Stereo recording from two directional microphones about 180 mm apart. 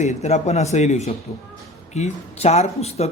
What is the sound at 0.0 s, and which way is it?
Speech, 40° left (ahead or behind).